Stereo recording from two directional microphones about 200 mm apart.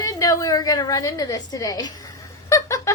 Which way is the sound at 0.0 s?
15° left (ahead or behind).